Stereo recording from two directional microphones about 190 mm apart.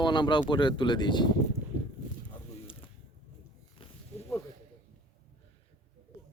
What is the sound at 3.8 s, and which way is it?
Snake, 30° left (ahead or behind).